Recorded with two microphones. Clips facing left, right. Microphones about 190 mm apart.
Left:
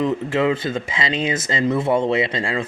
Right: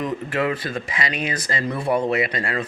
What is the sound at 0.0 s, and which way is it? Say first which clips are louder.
Speech: left 4 dB; 25° left (ahead or behind).